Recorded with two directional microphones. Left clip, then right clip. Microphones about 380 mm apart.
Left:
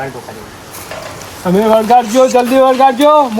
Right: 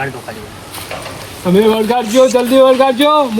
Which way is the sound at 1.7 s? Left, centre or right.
Centre.